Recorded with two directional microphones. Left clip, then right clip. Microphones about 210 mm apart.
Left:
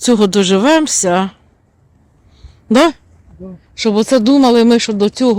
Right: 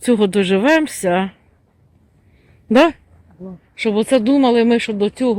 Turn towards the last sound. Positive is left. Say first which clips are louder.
# left 4 dB
turn(degrees=25)  # may be behind; listen again after turning